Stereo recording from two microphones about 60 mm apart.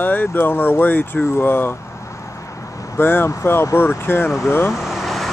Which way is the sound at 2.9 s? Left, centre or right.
Left.